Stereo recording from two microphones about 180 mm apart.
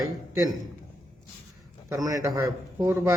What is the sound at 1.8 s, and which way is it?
A man's voice, 20° right (ahead or behind).